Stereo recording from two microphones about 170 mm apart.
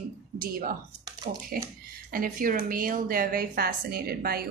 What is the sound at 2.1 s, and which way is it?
A woman's voice, 55° right (ahead or behind).